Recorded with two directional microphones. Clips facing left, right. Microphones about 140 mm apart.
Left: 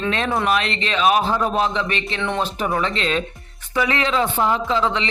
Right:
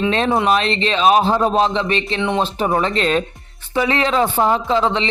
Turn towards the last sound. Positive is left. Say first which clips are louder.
# right 3 dB
turn(degrees=-30)  # may be behind; listen again after turning